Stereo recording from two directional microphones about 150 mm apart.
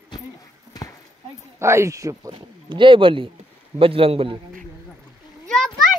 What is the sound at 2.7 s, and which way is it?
A man's voice, 35° right (ahead or behind).